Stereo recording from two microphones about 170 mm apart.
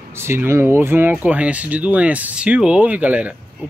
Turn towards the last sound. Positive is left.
turn(degrees=-10)  # may be behind; listen again after turning